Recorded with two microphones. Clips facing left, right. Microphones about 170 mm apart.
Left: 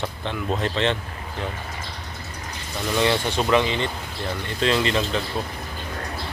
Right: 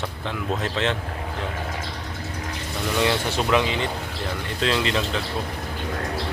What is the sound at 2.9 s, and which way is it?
Speech, 5° right (ahead or behind).